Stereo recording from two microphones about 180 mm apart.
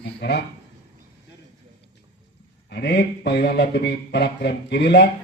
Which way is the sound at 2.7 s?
65° left (ahead or behind).